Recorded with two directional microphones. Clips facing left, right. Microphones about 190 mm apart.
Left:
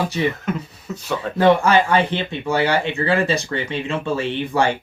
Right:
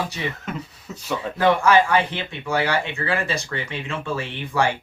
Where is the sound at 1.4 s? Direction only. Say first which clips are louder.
Left 2 dB; 25° left (ahead or behind).